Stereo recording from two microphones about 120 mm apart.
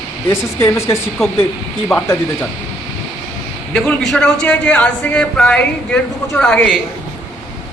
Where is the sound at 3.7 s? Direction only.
5° left (ahead or behind).